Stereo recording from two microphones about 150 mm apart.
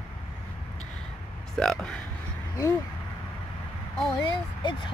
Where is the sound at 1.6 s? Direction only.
5° left (ahead or behind).